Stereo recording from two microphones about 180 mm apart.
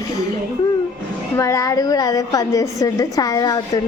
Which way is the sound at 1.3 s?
15° left (ahead or behind).